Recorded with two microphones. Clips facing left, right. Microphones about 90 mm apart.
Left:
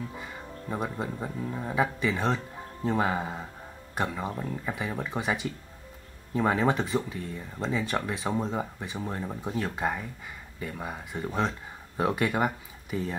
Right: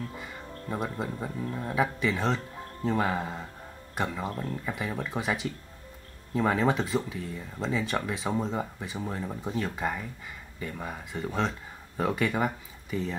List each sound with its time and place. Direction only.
0.0 s speech: 5° left (ahead or behind)